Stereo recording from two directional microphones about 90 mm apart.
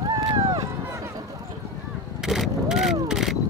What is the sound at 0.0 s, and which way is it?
Run, 45° right (ahead or behind).